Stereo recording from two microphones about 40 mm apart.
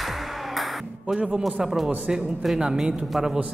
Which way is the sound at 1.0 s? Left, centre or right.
Centre.